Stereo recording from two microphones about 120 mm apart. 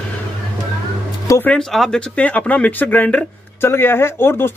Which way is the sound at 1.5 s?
5° left (ahead or behind).